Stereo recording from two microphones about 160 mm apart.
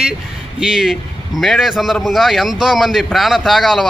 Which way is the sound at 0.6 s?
Centre (ahead or behind).